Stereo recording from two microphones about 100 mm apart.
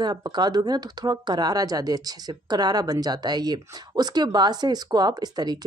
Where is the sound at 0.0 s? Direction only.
45° right (ahead or behind).